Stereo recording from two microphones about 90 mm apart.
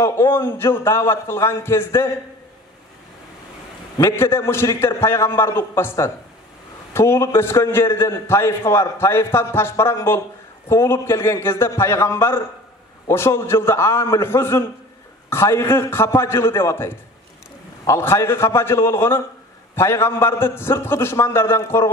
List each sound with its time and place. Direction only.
0.0 s a man's voice: 30° left (ahead or behind)
4.0 s a man's voice: 30° left (ahead or behind)